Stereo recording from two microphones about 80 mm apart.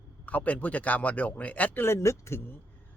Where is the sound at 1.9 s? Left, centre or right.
Left.